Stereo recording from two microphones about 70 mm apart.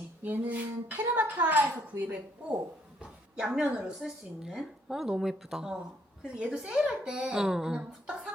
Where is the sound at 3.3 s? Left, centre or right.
Centre.